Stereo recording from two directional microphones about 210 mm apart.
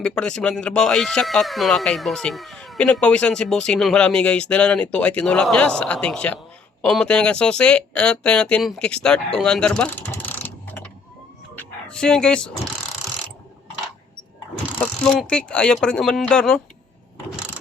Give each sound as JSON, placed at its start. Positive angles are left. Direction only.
{"t": 0.0, "sound": "speech", "side_deg": 5}
{"t": 15.0, "sound": "speech", "side_deg": 5}